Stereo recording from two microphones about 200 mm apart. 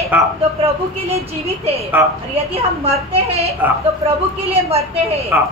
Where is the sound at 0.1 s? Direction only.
10° right (ahead or behind).